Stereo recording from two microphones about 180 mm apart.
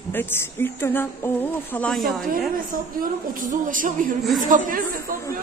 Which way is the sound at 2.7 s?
50° right (ahead or behind).